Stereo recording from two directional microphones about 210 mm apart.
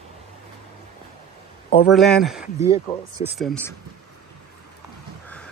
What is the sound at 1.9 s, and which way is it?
Speech, centre (ahead or behind).